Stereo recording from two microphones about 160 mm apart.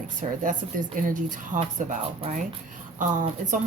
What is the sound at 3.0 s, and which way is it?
Speech, 55° right (ahead or behind).